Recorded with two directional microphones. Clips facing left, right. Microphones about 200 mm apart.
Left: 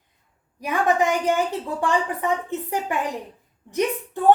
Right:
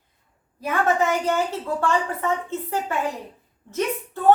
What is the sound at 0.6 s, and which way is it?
A woman's voice, 15° left (ahead or behind).